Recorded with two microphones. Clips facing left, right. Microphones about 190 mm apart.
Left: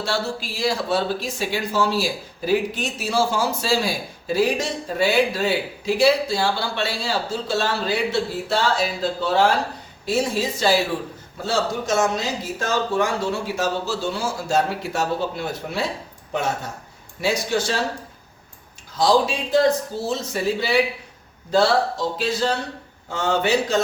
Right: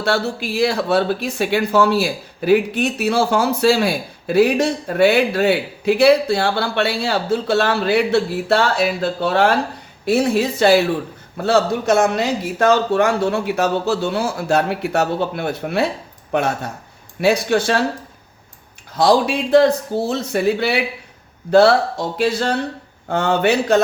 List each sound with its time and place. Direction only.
0.0 s speech: 60° right (ahead or behind)
18.9 s speech: 60° right (ahead or behind)
23.0 s speech: 60° right (ahead or behind)